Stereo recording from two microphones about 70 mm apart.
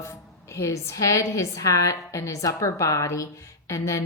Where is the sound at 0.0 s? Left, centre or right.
Left.